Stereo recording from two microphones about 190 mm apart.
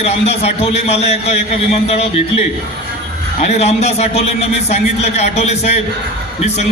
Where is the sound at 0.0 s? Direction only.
35° left (ahead or behind).